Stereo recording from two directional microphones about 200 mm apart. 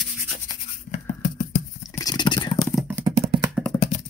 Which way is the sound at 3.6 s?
Centre (ahead or behind).